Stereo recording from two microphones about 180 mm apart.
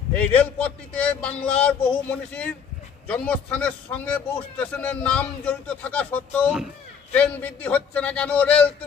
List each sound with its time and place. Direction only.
0.1 s a man's voice: 10° left (ahead or behind)